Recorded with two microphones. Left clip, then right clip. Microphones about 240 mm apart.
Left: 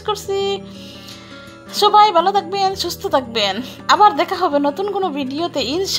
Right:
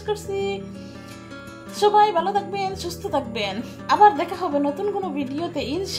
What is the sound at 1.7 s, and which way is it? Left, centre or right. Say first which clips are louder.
Speech: left 6 dB; left.